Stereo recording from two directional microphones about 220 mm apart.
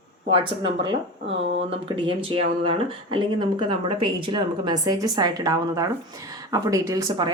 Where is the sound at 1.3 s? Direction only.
55° right (ahead or behind).